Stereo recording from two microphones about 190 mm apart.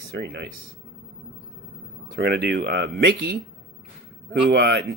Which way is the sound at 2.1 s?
60° right (ahead or behind).